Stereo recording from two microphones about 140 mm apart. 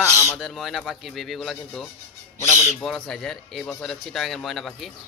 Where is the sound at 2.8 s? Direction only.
5° left (ahead or behind).